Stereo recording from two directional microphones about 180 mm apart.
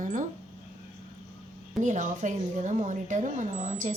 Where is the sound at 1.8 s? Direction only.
45° right (ahead or behind).